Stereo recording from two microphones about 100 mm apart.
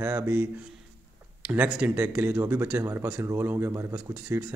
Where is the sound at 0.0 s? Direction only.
20° right (ahead or behind).